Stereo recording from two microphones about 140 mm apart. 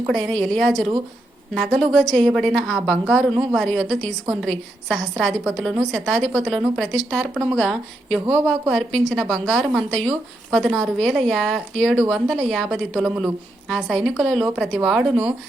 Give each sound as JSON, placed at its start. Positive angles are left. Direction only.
{"t": 0.1, "sound": "a woman's voice", "side_deg": 5}